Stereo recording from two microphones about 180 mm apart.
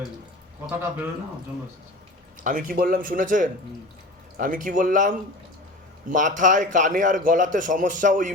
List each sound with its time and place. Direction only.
0.7 s speech: 10° right (ahead or behind)
2.4 s a man's voice: 50° right (ahead or behind)